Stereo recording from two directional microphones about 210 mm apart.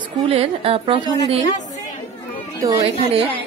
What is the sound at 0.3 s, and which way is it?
Speech, 25° right (ahead or behind).